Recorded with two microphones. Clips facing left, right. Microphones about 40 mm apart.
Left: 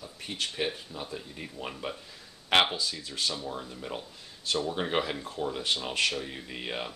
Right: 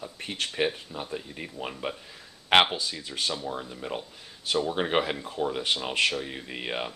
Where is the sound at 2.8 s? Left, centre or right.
Centre.